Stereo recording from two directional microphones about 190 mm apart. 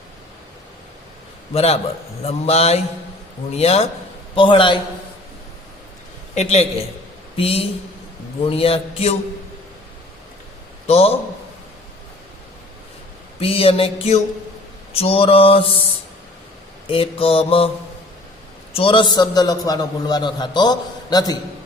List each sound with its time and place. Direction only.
1.5 s a man's voice: 35° left (ahead or behind)
6.3 s a man's voice: 35° left (ahead or behind)
10.8 s a man's voice: 30° left (ahead or behind)
13.4 s a man's voice: 30° left (ahead or behind)
16.8 s a man's voice: 30° left (ahead or behind)
18.7 s a man's voice: 30° left (ahead or behind)